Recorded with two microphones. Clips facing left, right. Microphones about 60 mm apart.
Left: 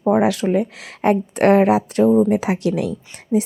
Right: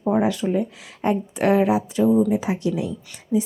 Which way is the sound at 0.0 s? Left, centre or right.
Left.